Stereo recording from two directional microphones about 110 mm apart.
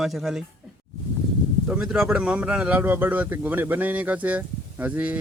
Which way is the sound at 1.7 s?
5° right (ahead or behind).